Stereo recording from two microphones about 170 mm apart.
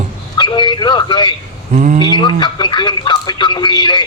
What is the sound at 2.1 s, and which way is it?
Speech, 25° left (ahead or behind).